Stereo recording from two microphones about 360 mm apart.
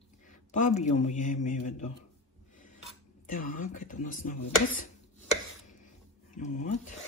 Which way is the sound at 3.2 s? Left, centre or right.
Left.